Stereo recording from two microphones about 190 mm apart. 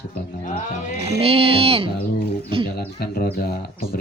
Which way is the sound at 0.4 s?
40° left (ahead or behind).